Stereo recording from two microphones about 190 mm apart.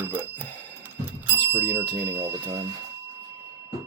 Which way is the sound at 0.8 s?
10° right (ahead or behind).